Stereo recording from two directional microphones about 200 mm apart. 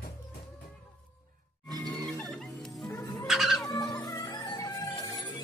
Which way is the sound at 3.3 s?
Centre (ahead or behind).